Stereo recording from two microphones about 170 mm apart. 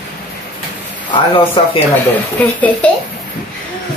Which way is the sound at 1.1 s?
30° left (ahead or behind).